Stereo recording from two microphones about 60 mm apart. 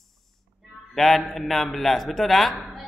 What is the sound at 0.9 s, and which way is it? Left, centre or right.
Mantra, centre.